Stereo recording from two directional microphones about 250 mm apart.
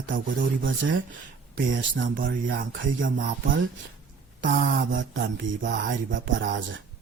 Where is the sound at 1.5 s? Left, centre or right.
Right.